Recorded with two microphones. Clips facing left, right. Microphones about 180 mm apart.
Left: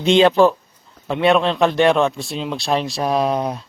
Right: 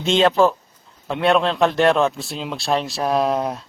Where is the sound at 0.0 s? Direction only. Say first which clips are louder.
Left 3 dB; centre (ahead or behind).